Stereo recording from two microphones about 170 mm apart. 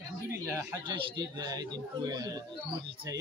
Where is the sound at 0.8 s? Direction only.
30° right (ahead or behind).